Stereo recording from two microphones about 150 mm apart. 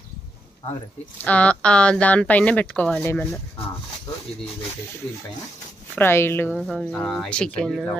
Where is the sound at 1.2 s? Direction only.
10° left (ahead or behind).